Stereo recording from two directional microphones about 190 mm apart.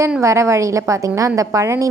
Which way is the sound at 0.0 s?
15° right (ahead or behind).